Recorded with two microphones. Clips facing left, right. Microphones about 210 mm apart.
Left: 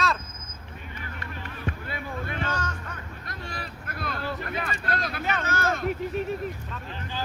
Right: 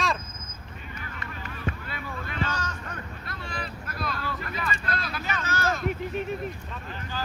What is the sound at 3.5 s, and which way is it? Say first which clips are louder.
Vehicle: right 2 dB; 50° left (ahead or behind).